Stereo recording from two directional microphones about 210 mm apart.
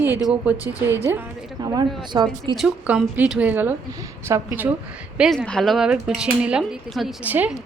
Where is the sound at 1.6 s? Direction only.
15° right (ahead or behind).